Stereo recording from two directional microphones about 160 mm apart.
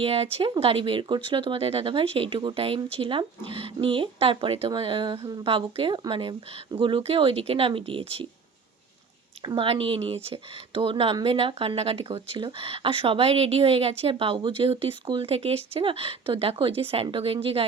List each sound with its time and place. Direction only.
0.0 s speech: 35° right (ahead or behind)
9.4 s speech: 30° right (ahead or behind)